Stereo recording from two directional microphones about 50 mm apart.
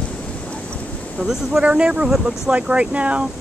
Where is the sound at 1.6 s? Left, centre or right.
Centre.